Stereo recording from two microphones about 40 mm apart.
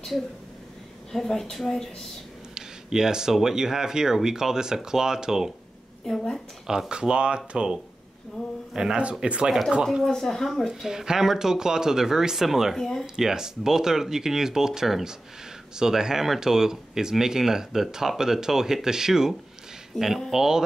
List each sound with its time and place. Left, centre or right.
1.1 s speech: centre
2.5 s speech: centre
6.7 s speech: centre
10.0 s speech: centre
10.7 s speech: centre
12.7 s speech: centre
13.0 s speech: centre
19.9 s speech: centre
20.2 s speech: centre